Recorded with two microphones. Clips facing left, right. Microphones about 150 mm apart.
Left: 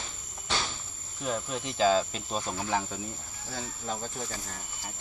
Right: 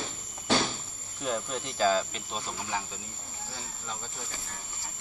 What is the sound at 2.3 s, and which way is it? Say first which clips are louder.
Speech: left 4 dB; 45° left (ahead or behind).